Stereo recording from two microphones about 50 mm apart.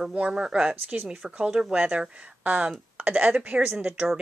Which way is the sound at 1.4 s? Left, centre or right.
Centre.